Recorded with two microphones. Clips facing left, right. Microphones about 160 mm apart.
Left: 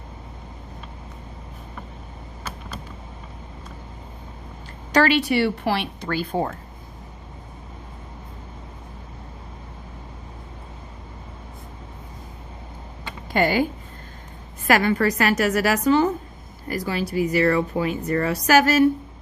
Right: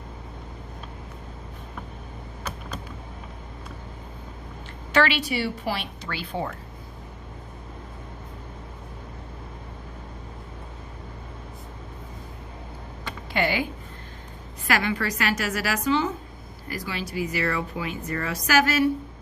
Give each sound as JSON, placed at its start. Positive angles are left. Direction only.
{"t": 4.9, "sound": "a woman's voice", "side_deg": 40}
{"t": 5.2, "sound": "a woman's voice", "side_deg": 65}
{"t": 13.3, "sound": "a woman's voice", "side_deg": 45}
{"t": 14.7, "sound": "a woman's voice", "side_deg": 45}